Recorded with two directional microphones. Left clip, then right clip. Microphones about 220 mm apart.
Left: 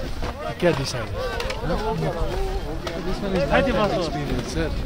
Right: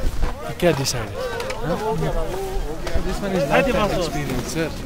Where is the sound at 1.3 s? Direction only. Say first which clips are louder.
Right 1 dB; 5° right (ahead or behind).